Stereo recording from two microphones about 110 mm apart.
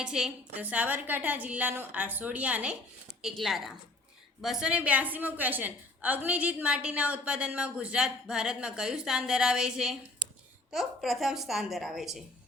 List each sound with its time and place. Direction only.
0.0 s a woman's voice: 5° right (ahead or behind)
3.2 s a woman's voice: centre (ahead or behind)